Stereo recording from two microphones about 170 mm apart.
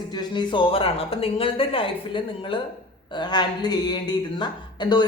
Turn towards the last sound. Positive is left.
turn(degrees=25)  # may be behind; listen again after turning